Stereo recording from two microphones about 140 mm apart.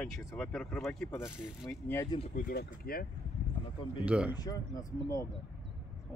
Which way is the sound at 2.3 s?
90° left.